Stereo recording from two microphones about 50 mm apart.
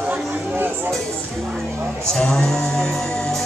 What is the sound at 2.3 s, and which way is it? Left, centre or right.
Music, centre.